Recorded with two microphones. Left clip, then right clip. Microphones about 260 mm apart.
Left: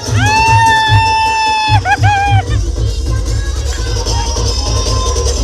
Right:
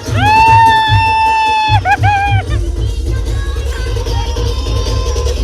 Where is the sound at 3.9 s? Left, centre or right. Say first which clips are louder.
Left 4 dB; left.